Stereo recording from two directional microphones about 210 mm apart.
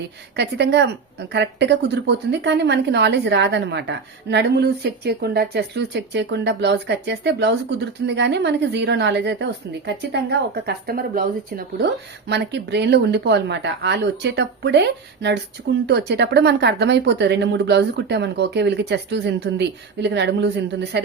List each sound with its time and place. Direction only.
0.3 s speech: 55° right (ahead or behind)
12.3 s speech: 55° right (ahead or behind)